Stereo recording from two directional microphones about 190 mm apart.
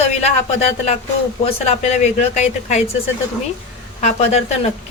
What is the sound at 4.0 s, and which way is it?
Speech, 35° left (ahead or behind).